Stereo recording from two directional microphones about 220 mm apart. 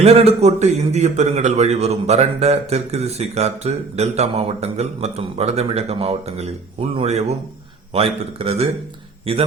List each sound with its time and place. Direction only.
0.0 s a man's voice: 25° right (ahead or behind)